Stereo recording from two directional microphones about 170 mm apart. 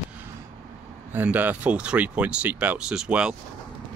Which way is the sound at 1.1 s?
10° right (ahead or behind).